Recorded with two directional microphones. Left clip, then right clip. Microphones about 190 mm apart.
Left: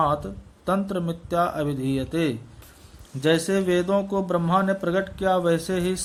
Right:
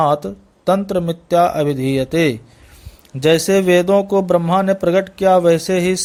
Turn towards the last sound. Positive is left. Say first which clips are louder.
# right 9 dB
turn(degrees=-40)  # may be behind; listen again after turning